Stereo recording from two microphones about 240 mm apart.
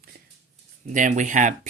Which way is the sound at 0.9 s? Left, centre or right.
Right.